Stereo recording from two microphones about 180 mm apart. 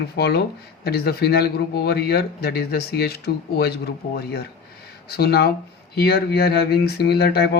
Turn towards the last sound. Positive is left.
turn(degrees=65)  # may be behind; listen again after turning